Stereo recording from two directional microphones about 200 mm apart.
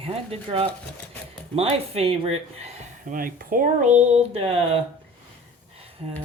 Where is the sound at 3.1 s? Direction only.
45° right (ahead or behind); by 4.8 s 30° right (ahead or behind).